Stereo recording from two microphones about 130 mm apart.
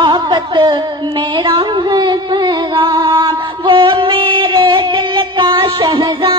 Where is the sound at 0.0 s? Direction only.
35° right (ahead or behind).